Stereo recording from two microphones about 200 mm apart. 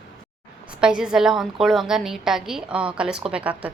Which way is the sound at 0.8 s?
5° right (ahead or behind).